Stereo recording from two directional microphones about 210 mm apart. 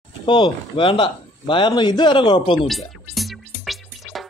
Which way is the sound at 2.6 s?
Centre (ahead or behind).